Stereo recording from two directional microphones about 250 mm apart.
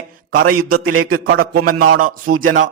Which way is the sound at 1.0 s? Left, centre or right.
Right.